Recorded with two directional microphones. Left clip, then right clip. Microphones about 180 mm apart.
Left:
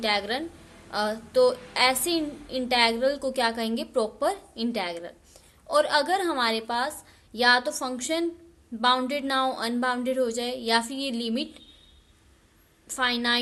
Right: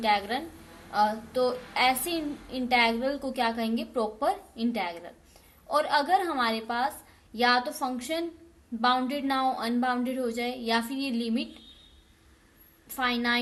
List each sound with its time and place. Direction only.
0.0 s a woman's voice: 35° left (ahead or behind)
12.9 s a woman's voice: 30° left (ahead or behind)